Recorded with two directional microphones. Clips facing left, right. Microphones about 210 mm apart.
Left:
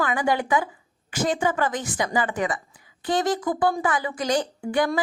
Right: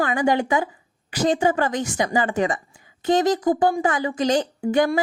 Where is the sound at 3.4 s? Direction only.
40° right (ahead or behind).